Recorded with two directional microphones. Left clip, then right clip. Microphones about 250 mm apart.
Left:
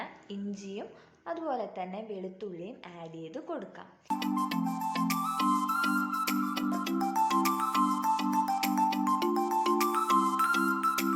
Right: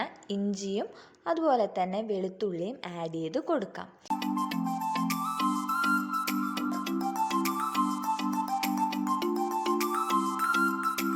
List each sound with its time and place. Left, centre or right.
0.0 s a woman's voice: right
4.1 s music: centre